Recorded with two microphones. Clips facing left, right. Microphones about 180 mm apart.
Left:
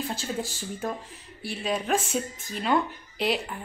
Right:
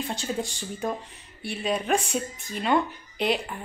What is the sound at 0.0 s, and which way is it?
Speech, centre (ahead or behind).